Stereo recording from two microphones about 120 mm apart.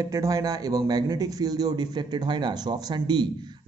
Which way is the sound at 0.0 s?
30° right (ahead or behind).